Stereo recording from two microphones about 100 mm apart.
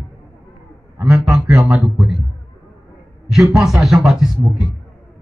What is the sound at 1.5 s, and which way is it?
Speech, 15° right (ahead or behind).